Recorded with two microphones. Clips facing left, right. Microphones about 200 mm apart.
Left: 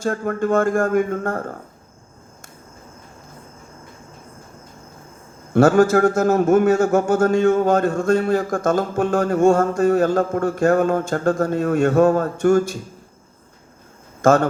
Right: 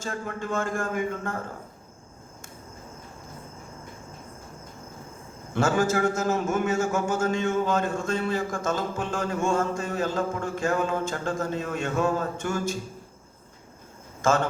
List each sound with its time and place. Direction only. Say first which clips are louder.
0.0 s a man's voice: left 11 dB; 55° left (ahead or behind)
5.6 s a man's voice: left 9 dB; 45° left (ahead or behind)